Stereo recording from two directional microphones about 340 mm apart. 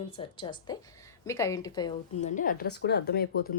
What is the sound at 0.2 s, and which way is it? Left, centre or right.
Speech, centre.